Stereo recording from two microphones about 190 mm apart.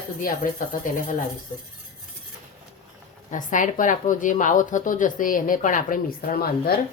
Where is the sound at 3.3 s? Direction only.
45° left (ahead or behind).